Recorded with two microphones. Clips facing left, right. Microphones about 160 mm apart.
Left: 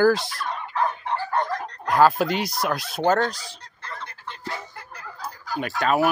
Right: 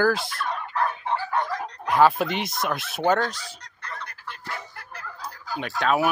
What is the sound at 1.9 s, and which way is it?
Speech, centre (ahead or behind).